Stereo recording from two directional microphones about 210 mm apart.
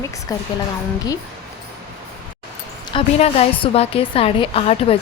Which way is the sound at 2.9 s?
25° left (ahead or behind).